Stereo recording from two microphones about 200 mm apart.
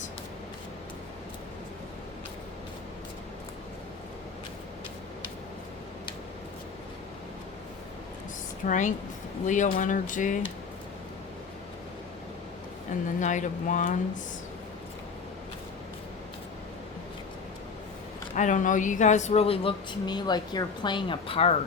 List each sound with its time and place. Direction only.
8.6 s speech: 40° left (ahead or behind)
12.9 s speech: 40° left (ahead or behind)
18.3 s speech: 40° left (ahead or behind)